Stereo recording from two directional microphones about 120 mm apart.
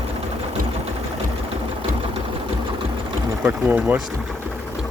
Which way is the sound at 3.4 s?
15° right (ahead or behind).